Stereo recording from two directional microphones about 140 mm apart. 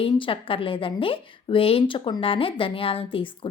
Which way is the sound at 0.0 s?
40° left (ahead or behind).